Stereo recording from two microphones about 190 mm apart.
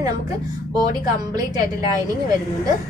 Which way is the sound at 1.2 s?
20° right (ahead or behind).